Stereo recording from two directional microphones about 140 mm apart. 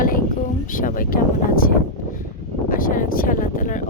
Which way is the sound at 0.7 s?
70° left (ahead or behind).